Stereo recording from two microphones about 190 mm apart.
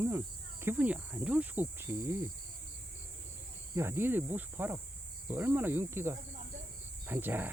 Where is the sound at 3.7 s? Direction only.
10° right (ahead or behind).